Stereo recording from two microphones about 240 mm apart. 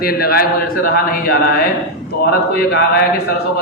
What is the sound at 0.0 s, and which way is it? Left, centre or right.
A man's voice, left.